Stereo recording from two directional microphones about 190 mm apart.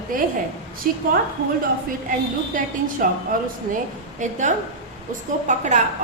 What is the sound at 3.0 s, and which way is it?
Speech, 45° right (ahead or behind).